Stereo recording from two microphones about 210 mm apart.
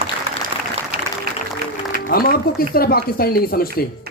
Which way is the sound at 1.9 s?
45° left (ahead or behind).